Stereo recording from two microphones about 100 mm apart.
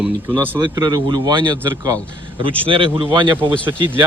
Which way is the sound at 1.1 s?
45° right (ahead or behind).